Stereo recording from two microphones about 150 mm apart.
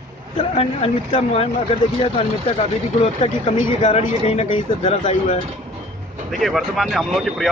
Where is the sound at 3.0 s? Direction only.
40° left (ahead or behind).